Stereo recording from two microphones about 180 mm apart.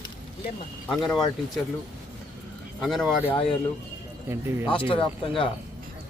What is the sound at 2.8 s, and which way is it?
Speech, centre (ahead or behind).